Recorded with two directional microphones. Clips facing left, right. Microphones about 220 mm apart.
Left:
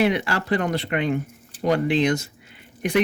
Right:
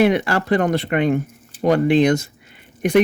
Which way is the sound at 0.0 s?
50° right (ahead or behind).